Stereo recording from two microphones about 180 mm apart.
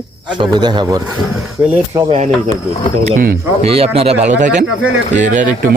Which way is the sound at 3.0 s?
50° right (ahead or behind).